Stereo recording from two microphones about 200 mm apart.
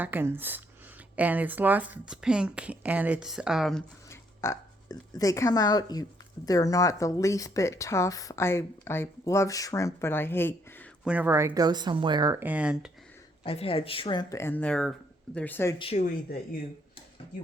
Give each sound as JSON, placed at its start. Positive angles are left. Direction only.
{"t": 0.0, "sound": "speech", "side_deg": -10}
{"t": 4.1, "sound": "speech", "side_deg": 15}
{"t": 11.0, "sound": "speech", "side_deg": -5}
{"t": 13.4, "sound": "speech", "side_deg": 30}
{"t": 15.8, "sound": "speech", "side_deg": 30}